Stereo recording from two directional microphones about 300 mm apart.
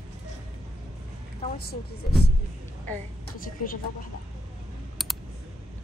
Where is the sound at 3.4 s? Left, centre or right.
Left.